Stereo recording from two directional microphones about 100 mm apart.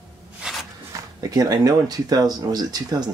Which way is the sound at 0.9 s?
35° right (ahead or behind).